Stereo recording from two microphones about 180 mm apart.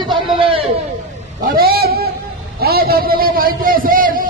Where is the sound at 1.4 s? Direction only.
55° right (ahead or behind).